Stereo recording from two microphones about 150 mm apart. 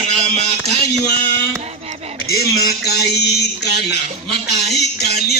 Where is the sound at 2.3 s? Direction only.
90° left.